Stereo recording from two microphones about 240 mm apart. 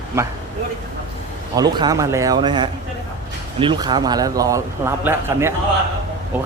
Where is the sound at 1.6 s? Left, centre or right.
Centre.